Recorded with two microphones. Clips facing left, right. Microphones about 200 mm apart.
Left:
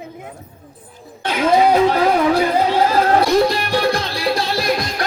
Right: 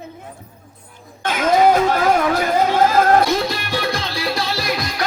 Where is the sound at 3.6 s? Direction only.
55° left (ahead or behind).